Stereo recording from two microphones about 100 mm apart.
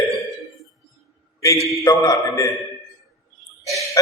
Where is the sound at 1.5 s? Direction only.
30° left (ahead or behind).